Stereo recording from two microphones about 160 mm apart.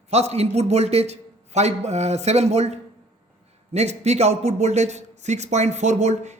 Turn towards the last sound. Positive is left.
turn(degrees=-45)  # may be behind; listen again after turning